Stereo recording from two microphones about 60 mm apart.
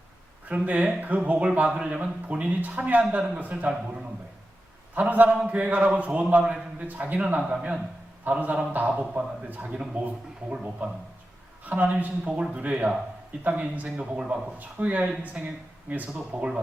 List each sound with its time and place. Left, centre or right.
0.4 s speech: right
7.4 s a man's voice: centre